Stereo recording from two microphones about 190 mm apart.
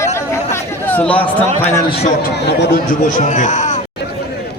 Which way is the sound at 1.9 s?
60° left (ahead or behind).